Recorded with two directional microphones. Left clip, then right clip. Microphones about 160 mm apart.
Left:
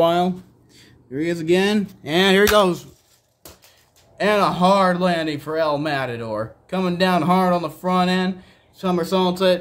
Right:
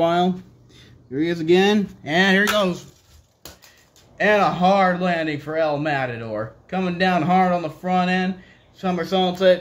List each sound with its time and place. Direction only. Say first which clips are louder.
0.0 s speech: left 1 dB; 25° left (ahead or behind)
1.1 s speech: right 1 dB; 10° left (ahead or behind)
2.0 s speech: left 1 dB; 25° left (ahead or behind)
2.3 s speech: left 4 dB; 40° left (ahead or behind)
4.2 s speech: even; 25° left (ahead or behind)